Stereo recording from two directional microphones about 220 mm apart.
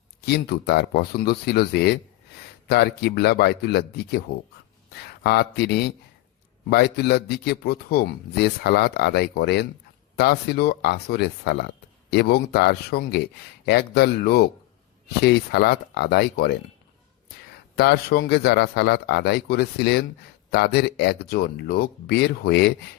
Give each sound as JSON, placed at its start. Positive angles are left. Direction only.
{"t": 0.3, "sound": "speech", "side_deg": 45}
{"t": 5.2, "sound": "speech", "side_deg": 45}
{"t": 17.7, "sound": "speech", "side_deg": 45}